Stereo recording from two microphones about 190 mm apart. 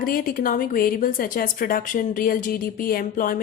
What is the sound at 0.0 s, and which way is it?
A woman's voice, 50° left (ahead or behind).